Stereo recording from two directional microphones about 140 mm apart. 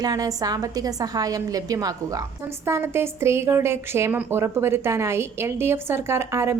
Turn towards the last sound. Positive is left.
turn(degrees=-20)  # may be behind; listen again after turning